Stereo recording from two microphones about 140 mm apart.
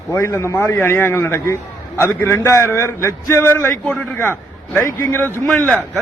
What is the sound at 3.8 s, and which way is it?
Speech, 5° left (ahead or behind).